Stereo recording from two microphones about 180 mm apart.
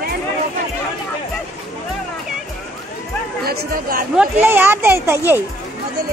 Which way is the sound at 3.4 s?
55° right (ahead or behind).